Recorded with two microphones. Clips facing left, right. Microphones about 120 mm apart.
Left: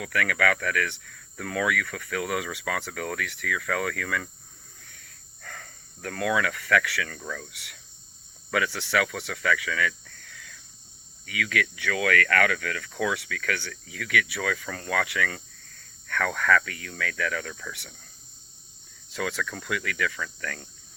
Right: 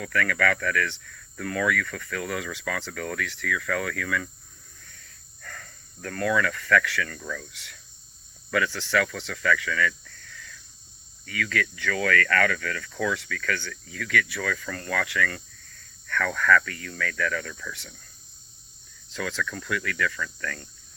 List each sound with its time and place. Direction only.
0.0 s speech: 60° left (ahead or behind)
5.5 s speech: 50° left (ahead or behind)
7.1 s speech: 40° left (ahead or behind)
7.5 s speech: 60° left (ahead or behind)
10.0 s cricket: 50° left (ahead or behind)
11.8 s speech: 60° left (ahead or behind)
19.1 s speech: 60° left (ahead or behind)